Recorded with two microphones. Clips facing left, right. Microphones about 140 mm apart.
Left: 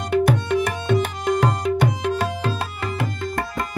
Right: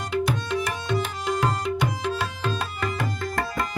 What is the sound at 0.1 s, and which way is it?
Tabla, 55° left (ahead or behind).